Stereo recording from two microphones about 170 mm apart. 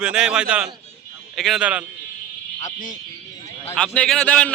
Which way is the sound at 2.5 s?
45° left (ahead or behind).